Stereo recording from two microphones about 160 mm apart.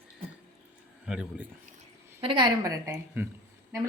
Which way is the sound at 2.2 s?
30° right (ahead or behind).